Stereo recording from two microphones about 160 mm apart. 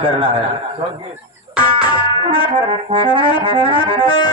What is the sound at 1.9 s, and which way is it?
Music, 30° right (ahead or behind).